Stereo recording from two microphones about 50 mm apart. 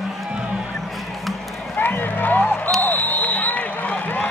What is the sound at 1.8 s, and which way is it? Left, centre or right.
Music, left.